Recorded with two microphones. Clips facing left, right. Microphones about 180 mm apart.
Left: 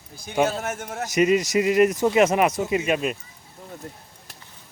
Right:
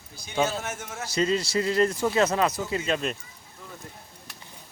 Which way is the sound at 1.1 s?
15° left (ahead or behind).